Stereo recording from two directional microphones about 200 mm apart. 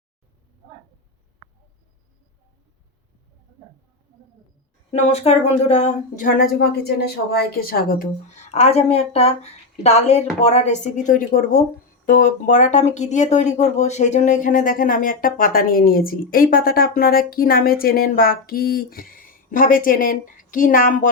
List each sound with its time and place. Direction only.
4.9 s a woman's voice: 35° left (ahead or behind)